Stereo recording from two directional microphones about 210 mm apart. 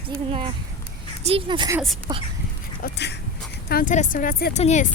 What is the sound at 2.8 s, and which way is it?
Speech, 55° left (ahead or behind).